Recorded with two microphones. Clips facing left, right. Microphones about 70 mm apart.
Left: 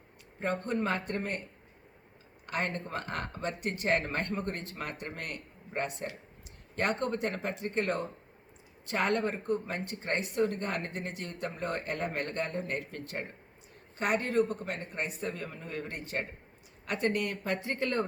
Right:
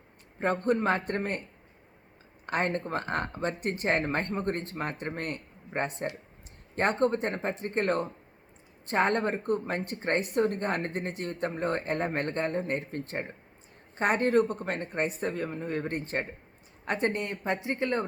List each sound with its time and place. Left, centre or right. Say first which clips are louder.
0.3 s speech: right 5 dB; right
2.5 s speech: right 5 dB; right